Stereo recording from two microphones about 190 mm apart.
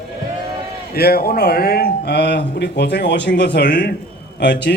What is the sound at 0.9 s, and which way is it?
A man's voice, 55° left (ahead or behind).